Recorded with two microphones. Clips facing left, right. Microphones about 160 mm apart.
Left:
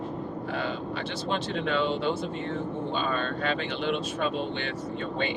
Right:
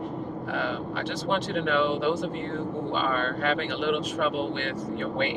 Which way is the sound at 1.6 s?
70° right (ahead or behind).